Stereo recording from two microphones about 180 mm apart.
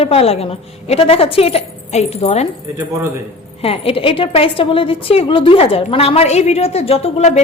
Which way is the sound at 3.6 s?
30° left (ahead or behind).